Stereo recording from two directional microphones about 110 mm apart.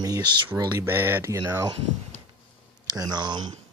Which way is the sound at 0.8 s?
20° right (ahead or behind).